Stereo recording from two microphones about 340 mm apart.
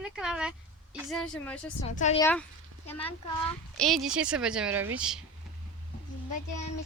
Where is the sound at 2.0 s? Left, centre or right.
Centre.